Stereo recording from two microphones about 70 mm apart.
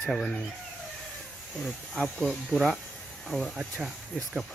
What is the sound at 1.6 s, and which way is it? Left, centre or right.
Speech, centre.